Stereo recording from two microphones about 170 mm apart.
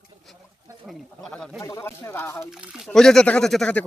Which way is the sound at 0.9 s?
5° left (ahead or behind).